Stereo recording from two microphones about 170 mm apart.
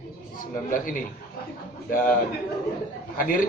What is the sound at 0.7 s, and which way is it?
Speech, 55° left (ahead or behind).